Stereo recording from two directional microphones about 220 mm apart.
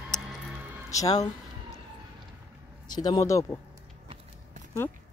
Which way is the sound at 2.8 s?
15° left (ahead or behind).